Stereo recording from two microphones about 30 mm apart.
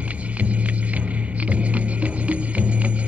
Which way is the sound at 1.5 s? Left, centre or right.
Right.